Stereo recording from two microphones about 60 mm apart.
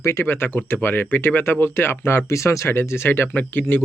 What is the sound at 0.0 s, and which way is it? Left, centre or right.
Speech, left.